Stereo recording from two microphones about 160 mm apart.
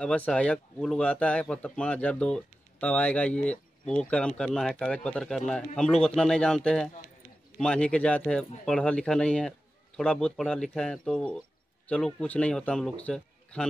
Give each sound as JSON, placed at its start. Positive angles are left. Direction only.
{"t": 0.0, "sound": "speech", "side_deg": 5}